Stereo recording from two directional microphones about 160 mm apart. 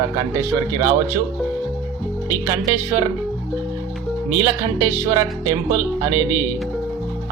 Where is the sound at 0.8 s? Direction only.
20° right (ahead or behind).